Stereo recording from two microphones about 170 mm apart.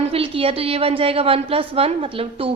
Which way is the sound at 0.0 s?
35° right (ahead or behind).